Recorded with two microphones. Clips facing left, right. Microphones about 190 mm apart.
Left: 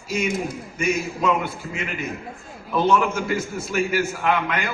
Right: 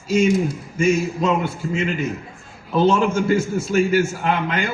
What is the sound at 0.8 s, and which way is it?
A man's voice, 30° right (ahead or behind).